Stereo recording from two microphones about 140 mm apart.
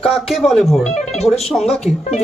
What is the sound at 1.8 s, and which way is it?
Speech, 50° left (ahead or behind).